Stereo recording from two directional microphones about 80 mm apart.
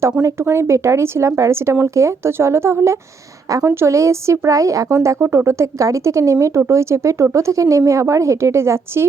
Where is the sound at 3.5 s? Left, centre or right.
Right.